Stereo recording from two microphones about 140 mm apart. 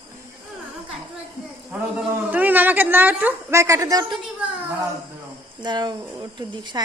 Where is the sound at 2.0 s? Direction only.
10° right (ahead or behind).